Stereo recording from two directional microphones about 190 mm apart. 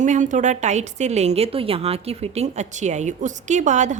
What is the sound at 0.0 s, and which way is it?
Speech, 40° right (ahead or behind).